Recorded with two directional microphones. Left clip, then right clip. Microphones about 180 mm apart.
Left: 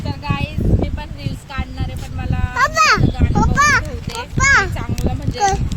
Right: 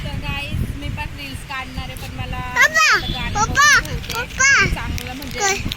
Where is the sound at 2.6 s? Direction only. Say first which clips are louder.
Even; 55° left (ahead or behind).